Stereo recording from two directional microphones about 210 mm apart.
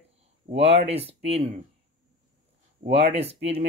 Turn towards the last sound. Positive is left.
turn(degrees=-30)  # may be behind; listen again after turning